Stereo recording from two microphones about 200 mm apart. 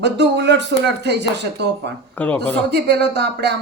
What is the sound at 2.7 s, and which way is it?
Speech, 55° right (ahead or behind).